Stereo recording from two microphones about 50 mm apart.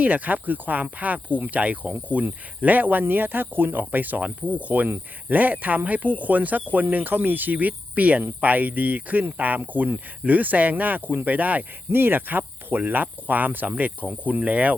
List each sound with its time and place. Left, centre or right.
0.0 s speech: right
11.9 s speech: right